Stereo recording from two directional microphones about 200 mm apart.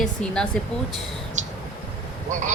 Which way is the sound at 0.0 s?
5° left (ahead or behind).